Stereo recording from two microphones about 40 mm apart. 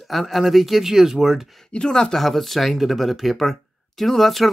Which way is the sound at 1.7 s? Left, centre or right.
Left.